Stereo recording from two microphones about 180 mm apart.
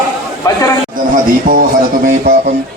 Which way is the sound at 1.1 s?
50° right (ahead or behind).